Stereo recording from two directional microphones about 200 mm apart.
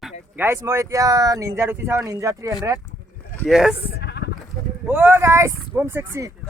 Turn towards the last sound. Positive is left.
turn(degrees=-10)  # may be behind; listen again after turning